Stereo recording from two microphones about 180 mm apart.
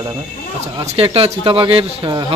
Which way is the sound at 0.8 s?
35° right (ahead or behind).